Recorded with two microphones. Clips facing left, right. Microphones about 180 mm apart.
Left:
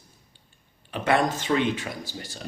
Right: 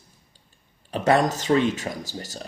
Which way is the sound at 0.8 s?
40° right (ahead or behind).